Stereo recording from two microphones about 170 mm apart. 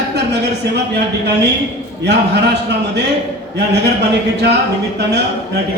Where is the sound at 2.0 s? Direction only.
80° right.